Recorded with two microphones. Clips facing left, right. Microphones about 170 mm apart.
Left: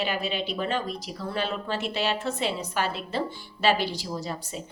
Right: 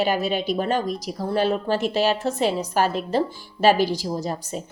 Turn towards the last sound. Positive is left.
turn(degrees=-45)  # may be behind; listen again after turning